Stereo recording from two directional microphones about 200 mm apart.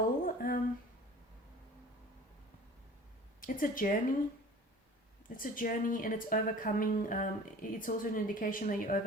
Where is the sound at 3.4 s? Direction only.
45° left (ahead or behind).